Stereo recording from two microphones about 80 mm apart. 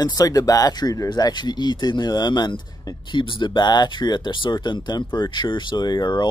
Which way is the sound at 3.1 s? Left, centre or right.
Left.